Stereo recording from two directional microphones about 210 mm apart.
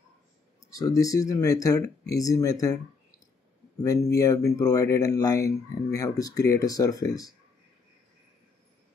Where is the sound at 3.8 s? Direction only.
15° left (ahead or behind).